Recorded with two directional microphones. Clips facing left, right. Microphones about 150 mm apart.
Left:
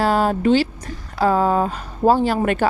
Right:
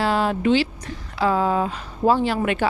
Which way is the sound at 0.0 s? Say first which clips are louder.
Left 3 dB; 45° left (ahead or behind).